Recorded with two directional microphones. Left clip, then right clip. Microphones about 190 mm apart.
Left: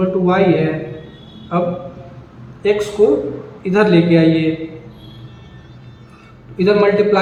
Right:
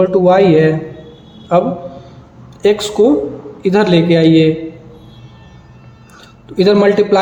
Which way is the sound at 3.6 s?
40° right (ahead or behind).